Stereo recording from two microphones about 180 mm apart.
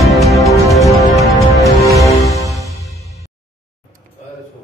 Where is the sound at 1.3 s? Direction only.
15° right (ahead or behind).